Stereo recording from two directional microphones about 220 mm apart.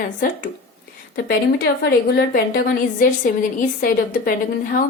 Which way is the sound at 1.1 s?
45° left (ahead or behind).